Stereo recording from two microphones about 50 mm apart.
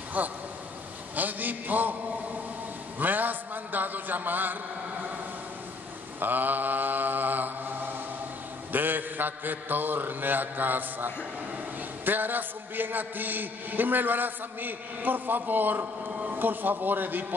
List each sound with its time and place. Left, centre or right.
0.2 s a man's voice: right
3.0 s a man's voice: right
6.1 s mantra: right
8.7 s a man's voice: right